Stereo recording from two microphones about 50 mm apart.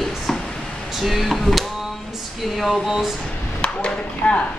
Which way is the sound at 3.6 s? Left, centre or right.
Left.